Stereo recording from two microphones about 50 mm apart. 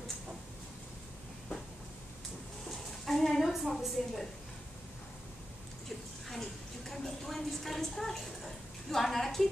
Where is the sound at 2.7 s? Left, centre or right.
Centre.